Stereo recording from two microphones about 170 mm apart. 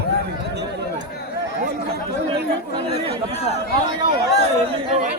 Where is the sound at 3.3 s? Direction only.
40° left (ahead or behind).